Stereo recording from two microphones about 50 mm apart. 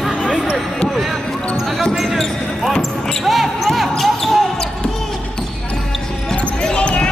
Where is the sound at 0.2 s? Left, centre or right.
Left.